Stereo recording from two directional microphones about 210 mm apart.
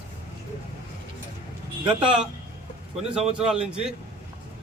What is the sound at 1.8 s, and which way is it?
Speech, 5° right (ahead or behind).